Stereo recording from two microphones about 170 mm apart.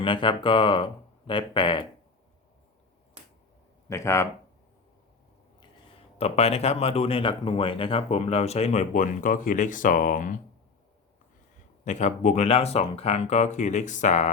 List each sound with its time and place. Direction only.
0.0 s speech: 30° left (ahead or behind)
3.8 s speech: 15° left (ahead or behind)
6.1 s speech: 35° left (ahead or behind)
11.9 s speech: 45° left (ahead or behind)